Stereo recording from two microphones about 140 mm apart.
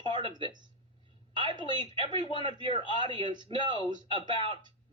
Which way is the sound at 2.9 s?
35° right (ahead or behind).